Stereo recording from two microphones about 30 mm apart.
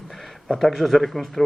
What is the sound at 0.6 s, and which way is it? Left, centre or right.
Speech, centre.